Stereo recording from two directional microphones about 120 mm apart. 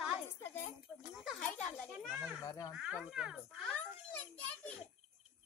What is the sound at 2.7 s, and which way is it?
Speech, 5° right (ahead or behind).